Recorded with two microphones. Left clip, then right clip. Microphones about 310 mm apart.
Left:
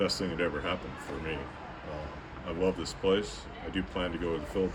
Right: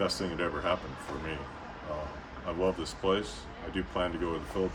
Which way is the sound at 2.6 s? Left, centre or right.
Centre.